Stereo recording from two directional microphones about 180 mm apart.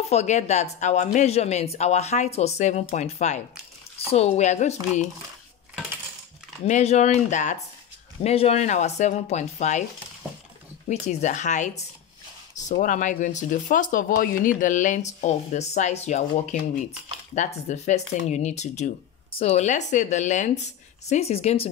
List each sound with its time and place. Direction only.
0.1 s speech: 40° left (ahead or behind)
6.6 s speech: 35° left (ahead or behind)
10.9 s speech: 40° left (ahead or behind)